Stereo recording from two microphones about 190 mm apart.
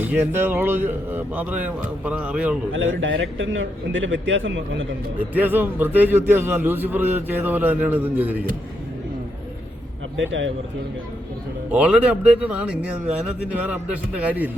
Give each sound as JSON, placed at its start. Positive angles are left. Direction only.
{"t": 0.0, "sound": "a man's voice", "side_deg": -10}
{"t": 2.7, "sound": "a man's voice", "side_deg": -85}
{"t": 5.2, "sound": "a man's voice", "side_deg": -10}
{"t": 10.2, "sound": "a man's voice", "side_deg": -80}
{"t": 11.7, "sound": "a man's voice", "side_deg": -5}